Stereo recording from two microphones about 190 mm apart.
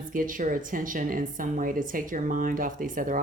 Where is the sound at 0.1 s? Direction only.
45° right (ahead or behind).